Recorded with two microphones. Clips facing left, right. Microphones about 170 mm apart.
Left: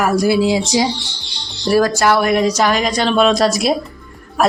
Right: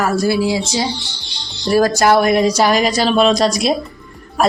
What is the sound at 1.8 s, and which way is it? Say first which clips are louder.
Speech: right 2 dB; 40° right (ahead or behind).